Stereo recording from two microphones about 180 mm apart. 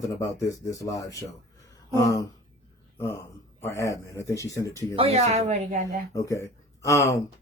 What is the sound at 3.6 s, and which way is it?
Speech, 15° left (ahead or behind).